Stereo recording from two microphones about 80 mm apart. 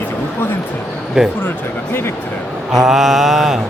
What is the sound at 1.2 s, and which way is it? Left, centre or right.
Speech, centre.